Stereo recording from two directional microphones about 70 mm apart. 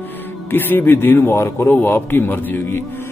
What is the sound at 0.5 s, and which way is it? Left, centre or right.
A man's voice, left.